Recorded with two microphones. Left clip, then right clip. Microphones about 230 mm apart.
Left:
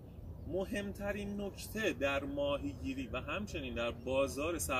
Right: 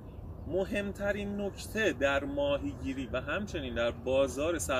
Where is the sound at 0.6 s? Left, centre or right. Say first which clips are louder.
Right 6 dB; centre.